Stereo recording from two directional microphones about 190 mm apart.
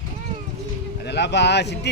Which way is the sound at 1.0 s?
65° left (ahead or behind).